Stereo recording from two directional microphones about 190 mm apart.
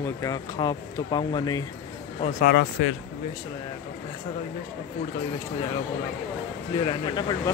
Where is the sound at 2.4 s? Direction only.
60° left (ahead or behind).